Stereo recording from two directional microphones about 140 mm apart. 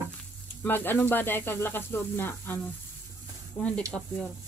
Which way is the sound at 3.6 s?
10° left (ahead or behind).